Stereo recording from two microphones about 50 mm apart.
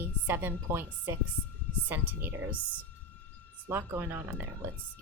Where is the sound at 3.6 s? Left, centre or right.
Right.